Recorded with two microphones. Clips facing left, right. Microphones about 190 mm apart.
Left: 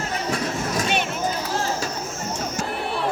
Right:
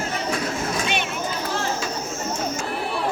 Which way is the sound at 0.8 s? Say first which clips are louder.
Left 4 dB; 40° left (ahead or behind).